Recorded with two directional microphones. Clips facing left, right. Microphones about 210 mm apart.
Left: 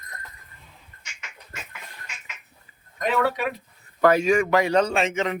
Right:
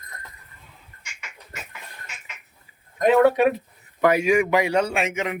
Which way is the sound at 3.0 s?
50° right (ahead or behind).